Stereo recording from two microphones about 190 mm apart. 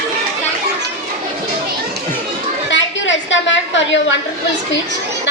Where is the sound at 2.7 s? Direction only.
75° left (ahead or behind).